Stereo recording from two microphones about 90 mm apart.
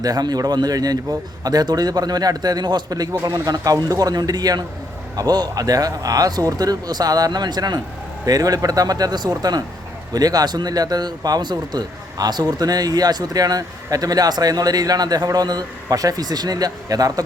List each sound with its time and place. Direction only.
0.0 s a man's voice: 45° right (ahead or behind)